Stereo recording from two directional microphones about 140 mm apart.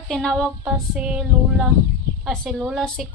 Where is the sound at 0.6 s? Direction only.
5° right (ahead or behind).